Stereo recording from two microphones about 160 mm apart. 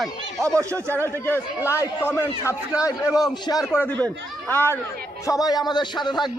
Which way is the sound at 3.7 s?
10° left (ahead or behind).